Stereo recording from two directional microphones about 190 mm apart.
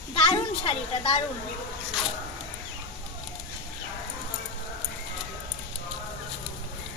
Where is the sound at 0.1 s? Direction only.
30° left (ahead or behind).